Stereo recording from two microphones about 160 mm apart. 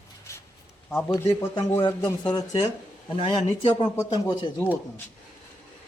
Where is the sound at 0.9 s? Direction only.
10° left (ahead or behind).